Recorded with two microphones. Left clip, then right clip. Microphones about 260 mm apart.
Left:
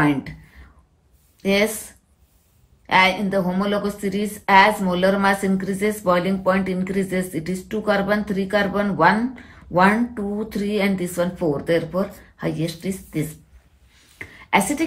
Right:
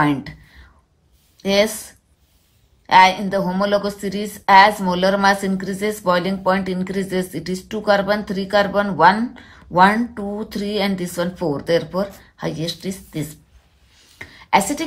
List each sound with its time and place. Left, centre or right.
1.4 s speech: centre
2.9 s a woman's voice: centre
14.1 s a sound: centre